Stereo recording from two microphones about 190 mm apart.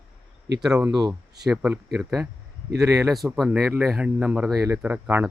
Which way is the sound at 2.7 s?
15° right (ahead or behind).